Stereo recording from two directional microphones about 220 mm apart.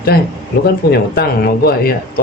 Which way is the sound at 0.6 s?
45° left (ahead or behind).